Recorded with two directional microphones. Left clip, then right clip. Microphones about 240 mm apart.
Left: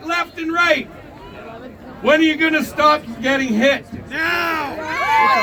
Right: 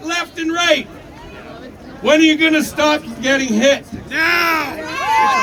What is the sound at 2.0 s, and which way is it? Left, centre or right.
A man's voice, centre.